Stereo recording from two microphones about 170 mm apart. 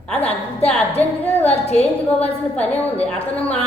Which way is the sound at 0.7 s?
10° left (ahead or behind).